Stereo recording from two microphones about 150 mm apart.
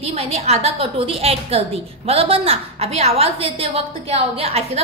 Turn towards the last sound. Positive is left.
turn(degrees=-45)  # may be behind; listen again after turning